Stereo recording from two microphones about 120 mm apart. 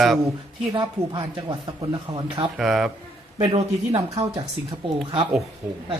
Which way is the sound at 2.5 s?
5° right (ahead or behind).